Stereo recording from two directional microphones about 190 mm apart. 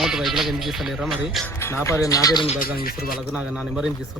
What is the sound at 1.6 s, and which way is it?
Speech, 15° left (ahead or behind).